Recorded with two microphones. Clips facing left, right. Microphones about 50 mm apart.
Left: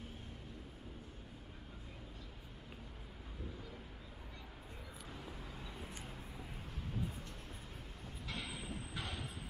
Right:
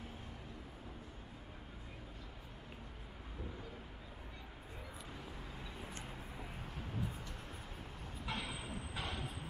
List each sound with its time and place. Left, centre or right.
5.1 s vehicle: centre
8.3 s train: right
8.9 s a sound: centre